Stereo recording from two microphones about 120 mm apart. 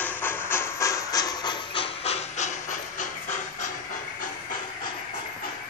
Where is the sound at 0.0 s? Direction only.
15° left (ahead or behind); by 3.3 s 90° left.